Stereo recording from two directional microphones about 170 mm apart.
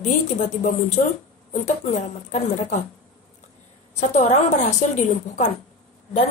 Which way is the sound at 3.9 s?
45° left (ahead or behind).